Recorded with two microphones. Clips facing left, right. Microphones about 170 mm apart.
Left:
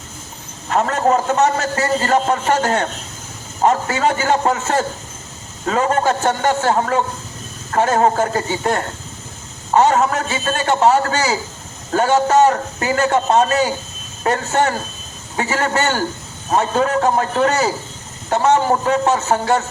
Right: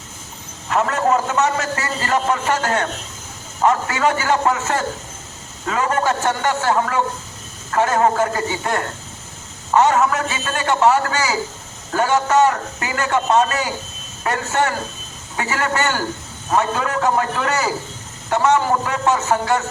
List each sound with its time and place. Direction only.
0.7 s a man's voice: 35° left (ahead or behind)